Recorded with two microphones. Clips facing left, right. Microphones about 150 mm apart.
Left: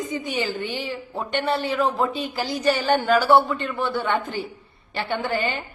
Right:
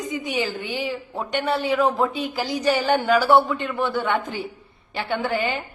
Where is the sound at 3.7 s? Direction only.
20° right (ahead or behind).